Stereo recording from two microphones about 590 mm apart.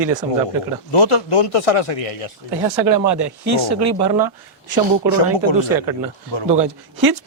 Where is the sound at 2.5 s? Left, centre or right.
Centre.